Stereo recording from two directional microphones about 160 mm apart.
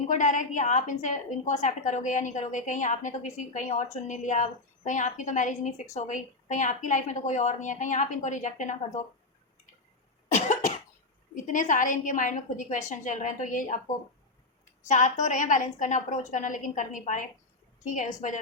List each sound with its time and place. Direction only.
0.1 s a woman's voice: 50° left (ahead or behind)
11.4 s a woman's voice: 55° left (ahead or behind)
14.8 s a woman's voice: 50° left (ahead or behind)